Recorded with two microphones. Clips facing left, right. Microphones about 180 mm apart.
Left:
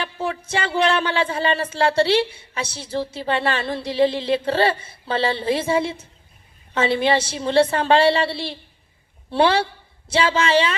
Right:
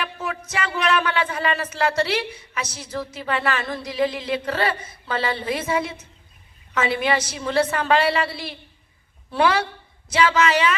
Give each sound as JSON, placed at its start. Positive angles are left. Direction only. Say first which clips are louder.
{"t": 0.0, "sound": "speech", "louder": "left 3 dB", "side_deg": 30}